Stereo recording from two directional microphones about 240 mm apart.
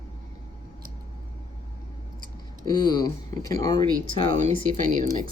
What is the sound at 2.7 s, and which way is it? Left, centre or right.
Speech, centre.